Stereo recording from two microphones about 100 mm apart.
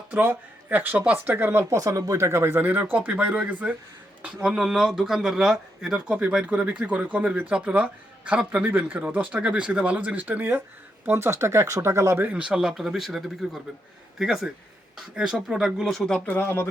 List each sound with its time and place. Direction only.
0.1 s speech: 20° right (ahead or behind)
1.7 s speech: 35° right (ahead or behind); by 16.2 s 5° left (ahead or behind)
16.2 s speech: 20° left (ahead or behind)